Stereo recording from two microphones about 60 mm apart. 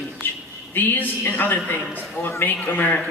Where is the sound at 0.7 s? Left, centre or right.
Left.